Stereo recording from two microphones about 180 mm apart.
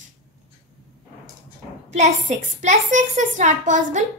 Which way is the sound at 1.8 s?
40° right (ahead or behind).